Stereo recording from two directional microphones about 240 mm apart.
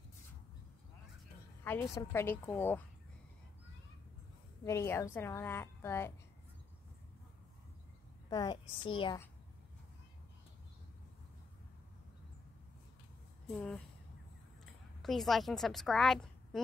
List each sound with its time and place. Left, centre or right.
1.6 s a woman's voice: centre
4.6 s a woman's voice: centre
8.3 s a woman's voice: centre
13.5 s speech: centre
15.0 s a woman's voice: centre